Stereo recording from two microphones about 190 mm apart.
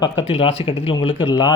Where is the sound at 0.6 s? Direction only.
30° left (ahead or behind).